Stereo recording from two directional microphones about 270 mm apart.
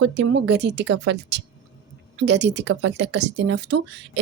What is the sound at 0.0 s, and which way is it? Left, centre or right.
Speech, right.